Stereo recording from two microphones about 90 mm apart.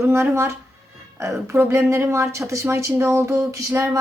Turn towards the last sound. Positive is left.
turn(degrees=-30)  # may be behind; listen again after turning